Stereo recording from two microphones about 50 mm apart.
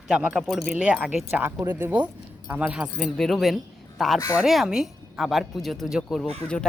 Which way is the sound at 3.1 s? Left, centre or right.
Centre.